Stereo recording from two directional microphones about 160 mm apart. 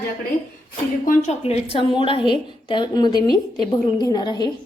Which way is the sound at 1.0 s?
50° left (ahead or behind).